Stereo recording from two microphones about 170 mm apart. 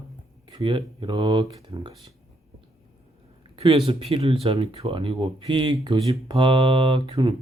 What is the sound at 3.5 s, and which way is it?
Speech, 35° right (ahead or behind).